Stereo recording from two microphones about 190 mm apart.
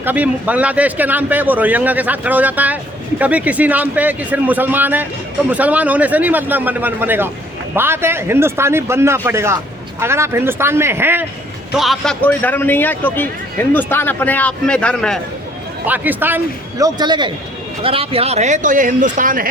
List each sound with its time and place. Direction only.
0.0 s a man's voice: 10° right (ahead or behind)
11.8 s a man's voice: centre (ahead or behind)
15.9 s a man's voice: 10° right (ahead or behind); by 19.5 s 45° right (ahead or behind)